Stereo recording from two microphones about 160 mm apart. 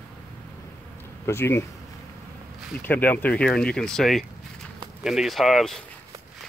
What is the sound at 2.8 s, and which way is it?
Speech, 10° left (ahead or behind).